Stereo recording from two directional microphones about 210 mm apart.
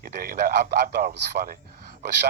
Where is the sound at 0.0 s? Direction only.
45° right (ahead or behind).